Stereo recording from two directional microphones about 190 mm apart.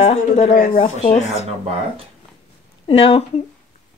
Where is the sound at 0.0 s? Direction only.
35° left (ahead or behind).